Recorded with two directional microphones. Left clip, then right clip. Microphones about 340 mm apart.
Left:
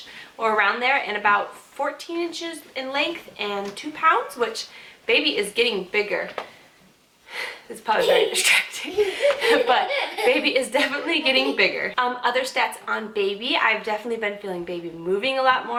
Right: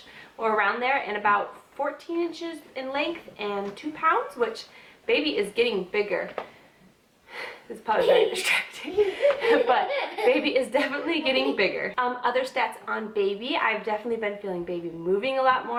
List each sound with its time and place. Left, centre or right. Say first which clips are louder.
0.4 s speech: left 4 dB; centre
5.0 s speech: left 4 dB; centre
7.9 s speech: left 2 dB; centre